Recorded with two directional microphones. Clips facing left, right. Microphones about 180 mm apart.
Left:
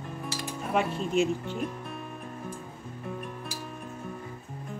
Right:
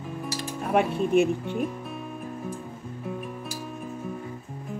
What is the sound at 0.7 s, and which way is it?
Speech, 55° right (ahead or behind).